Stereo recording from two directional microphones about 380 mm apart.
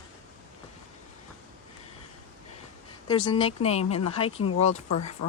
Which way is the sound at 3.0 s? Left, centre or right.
Centre.